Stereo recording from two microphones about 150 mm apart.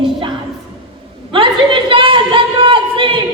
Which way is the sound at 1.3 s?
35° right (ahead or behind).